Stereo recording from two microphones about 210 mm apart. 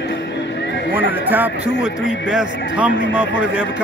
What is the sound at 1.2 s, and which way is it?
A man's voice, 10° right (ahead or behind).